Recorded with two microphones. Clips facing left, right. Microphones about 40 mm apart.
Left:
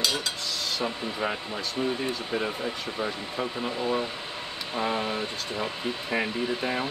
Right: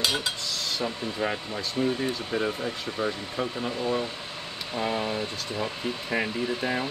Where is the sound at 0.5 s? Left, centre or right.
Centre.